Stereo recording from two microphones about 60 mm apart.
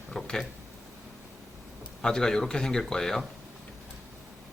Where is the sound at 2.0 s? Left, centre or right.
Centre.